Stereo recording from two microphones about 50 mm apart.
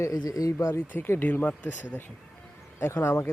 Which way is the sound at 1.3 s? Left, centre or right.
Left.